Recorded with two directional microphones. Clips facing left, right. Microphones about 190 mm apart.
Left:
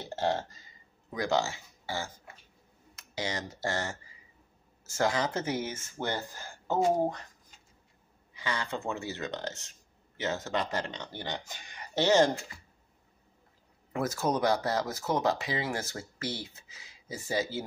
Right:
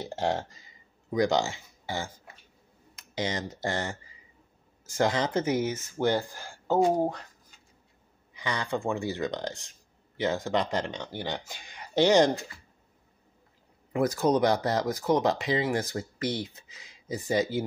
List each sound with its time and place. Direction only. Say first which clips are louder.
0.0 s speech: right 1 dB; 15° right (ahead or behind)
8.4 s speech: right 4 dB; 15° right (ahead or behind)
13.9 s speech: right 6 dB; 15° right (ahead or behind)